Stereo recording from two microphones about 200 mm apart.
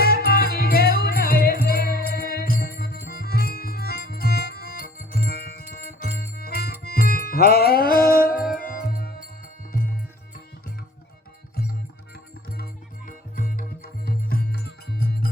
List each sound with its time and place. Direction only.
0.3 s music: 50° left (ahead or behind)
13.1 s music: 45° left (ahead or behind)